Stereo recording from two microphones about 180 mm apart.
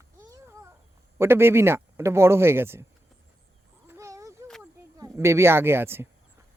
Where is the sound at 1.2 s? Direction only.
15° right (ahead or behind).